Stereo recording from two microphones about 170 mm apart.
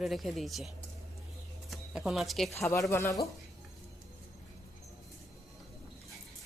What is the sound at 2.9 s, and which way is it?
Speech, 15° left (ahead or behind).